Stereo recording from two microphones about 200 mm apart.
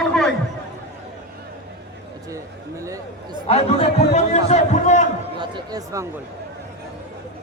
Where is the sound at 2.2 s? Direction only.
15° right (ahead or behind).